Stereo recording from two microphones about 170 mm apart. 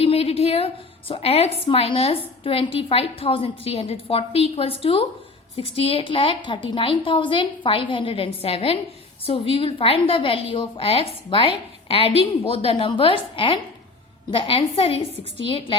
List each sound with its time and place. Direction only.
0.0 s a woman's voice: 35° left (ahead or behind)